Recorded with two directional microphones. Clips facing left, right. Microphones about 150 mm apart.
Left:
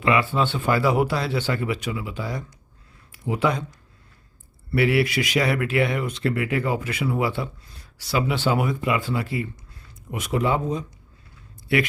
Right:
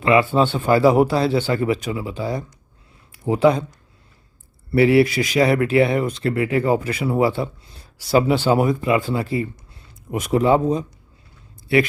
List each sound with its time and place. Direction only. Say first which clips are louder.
0.0 s speech: right 5 dB; 35° right (ahead or behind)
4.7 s speech: right 6 dB; 30° right (ahead or behind)